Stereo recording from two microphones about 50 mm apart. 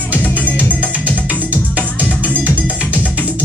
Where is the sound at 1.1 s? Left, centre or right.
Right.